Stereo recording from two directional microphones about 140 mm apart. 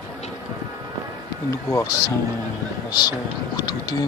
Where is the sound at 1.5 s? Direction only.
20° left (ahead or behind).